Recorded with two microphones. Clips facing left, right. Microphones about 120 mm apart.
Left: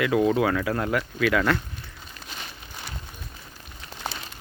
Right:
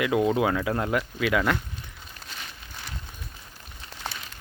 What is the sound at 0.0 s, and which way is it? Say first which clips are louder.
Speech: left 1 dB; 20° right (ahead or behind).